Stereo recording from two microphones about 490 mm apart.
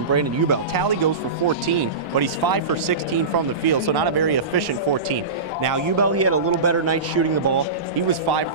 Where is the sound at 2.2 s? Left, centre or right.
Right.